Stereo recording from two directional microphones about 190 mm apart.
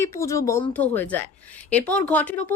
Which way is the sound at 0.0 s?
15° left (ahead or behind).